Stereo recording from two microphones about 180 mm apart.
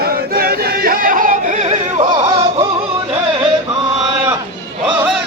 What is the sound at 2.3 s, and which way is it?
Music, 25° right (ahead or behind).